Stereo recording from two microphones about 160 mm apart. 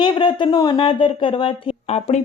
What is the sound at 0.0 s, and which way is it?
Speech, 30° left (ahead or behind).